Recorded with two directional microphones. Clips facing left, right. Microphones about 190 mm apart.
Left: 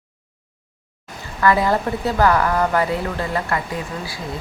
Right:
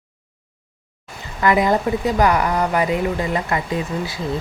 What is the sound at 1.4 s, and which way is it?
A woman's voice, 15° right (ahead or behind).